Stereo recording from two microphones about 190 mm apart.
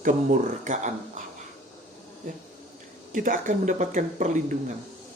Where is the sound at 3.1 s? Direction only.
45° right (ahead or behind).